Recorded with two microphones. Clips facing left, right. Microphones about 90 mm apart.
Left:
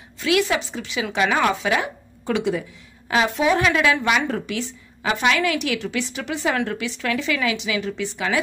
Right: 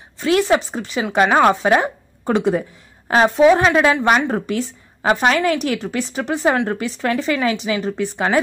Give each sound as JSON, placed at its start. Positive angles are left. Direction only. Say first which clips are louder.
{"t": 0.2, "sound": "a woman's voice", "louder": "right 4 dB", "side_deg": -40}